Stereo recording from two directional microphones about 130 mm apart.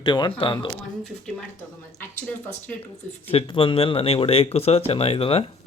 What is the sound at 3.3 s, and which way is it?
Speech, 40° left (ahead or behind).